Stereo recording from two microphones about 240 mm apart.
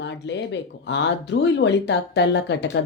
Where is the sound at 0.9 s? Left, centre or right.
Left.